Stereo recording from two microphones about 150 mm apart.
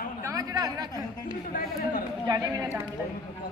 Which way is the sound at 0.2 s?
25° right (ahead or behind).